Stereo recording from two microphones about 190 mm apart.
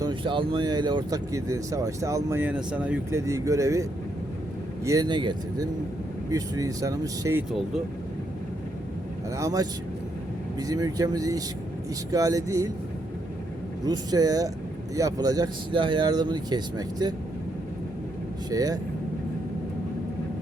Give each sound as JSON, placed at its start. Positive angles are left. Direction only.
{"t": 0.0, "sound": "speech", "side_deg": -25}
{"t": 4.9, "sound": "speech", "side_deg": -20}
{"t": 9.3, "sound": "speech", "side_deg": -15}
{"t": 13.8, "sound": "speech", "side_deg": -20}
{"t": 18.5, "sound": "speech", "side_deg": -20}